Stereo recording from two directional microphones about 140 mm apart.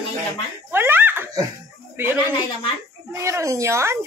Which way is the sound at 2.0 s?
15° right (ahead or behind).